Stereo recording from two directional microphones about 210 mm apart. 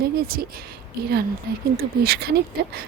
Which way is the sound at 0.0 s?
45° right (ahead or behind).